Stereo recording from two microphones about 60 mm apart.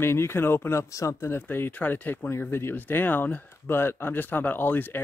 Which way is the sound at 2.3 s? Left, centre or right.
Left.